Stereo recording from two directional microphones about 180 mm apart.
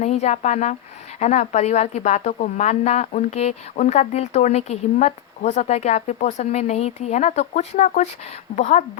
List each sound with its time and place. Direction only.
0.0 s a woman's voice: 40° left (ahead or behind)